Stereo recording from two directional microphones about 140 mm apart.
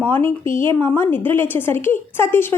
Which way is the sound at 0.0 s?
15° left (ahead or behind).